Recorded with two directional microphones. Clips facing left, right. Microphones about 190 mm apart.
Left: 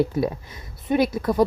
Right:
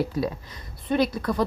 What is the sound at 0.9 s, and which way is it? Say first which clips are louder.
Speech: left 3 dB; 20° left (ahead or behind).